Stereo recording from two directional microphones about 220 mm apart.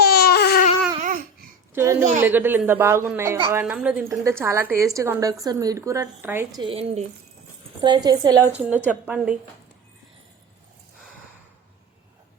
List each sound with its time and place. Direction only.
0.0 s babbling: 45° left (ahead or behind)
1.7 s a sound: 15° right (ahead or behind)
2.2 s a woman's voice: 10° right (ahead or behind)
6.6 s a woman's voice: 25° right (ahead or behind)
8.5 s a woman's voice: 5° right (ahead or behind)